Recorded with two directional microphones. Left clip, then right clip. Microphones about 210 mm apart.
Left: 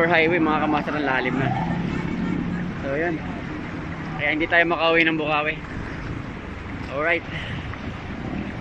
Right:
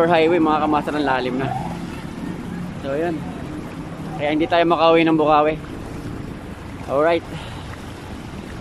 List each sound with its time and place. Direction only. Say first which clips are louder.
0.0 s speech: right 3 dB; 10° right (ahead or behind)
4.2 s speech: right 2 dB; 15° right (ahead or behind)
7.0 s speech: right 5 dB; 15° right (ahead or behind)